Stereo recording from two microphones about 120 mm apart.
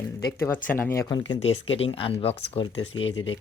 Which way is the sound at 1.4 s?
50° left (ahead or behind).